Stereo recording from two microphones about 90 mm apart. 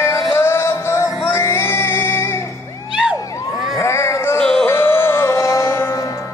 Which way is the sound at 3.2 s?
40° left (ahead or behind).